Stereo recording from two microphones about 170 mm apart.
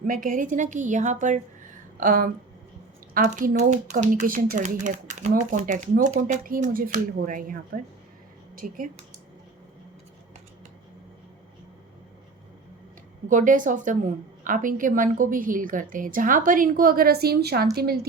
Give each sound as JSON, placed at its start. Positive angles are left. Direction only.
{"t": 0.0, "sound": "a woman's voice", "side_deg": -55}
{"t": 13.2, "sound": "a woman's voice", "side_deg": -50}